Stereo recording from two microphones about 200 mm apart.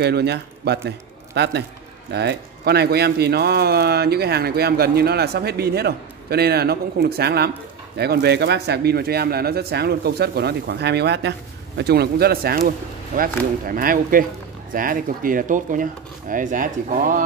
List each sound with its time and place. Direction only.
0.0 s speech: 55° right (ahead or behind)